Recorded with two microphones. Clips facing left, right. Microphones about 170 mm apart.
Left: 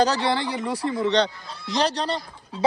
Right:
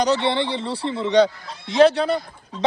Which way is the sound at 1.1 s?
5° right (ahead or behind).